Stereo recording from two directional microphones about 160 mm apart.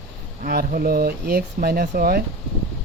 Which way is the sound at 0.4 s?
65° right (ahead or behind).